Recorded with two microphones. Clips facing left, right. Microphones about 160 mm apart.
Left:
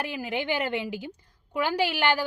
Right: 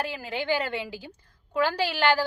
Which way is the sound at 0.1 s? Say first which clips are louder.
Right 1 dB; 15° left (ahead or behind).